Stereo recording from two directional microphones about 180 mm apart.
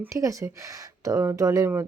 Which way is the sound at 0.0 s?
15° right (ahead or behind).